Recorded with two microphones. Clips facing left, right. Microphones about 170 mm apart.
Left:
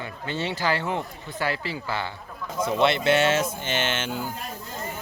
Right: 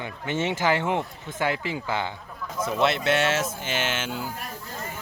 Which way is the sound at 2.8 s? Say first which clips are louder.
Left 2 dB; centre (ahead or behind).